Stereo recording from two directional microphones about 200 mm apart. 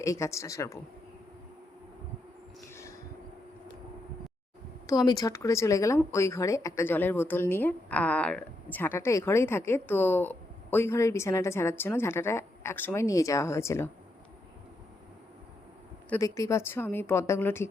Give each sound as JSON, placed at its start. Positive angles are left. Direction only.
{"t": 0.0, "sound": "speech", "side_deg": 15}
{"t": 2.7, "sound": "a sound", "side_deg": 15}
{"t": 4.9, "sound": "speech", "side_deg": 20}
{"t": 16.0, "sound": "speech", "side_deg": 15}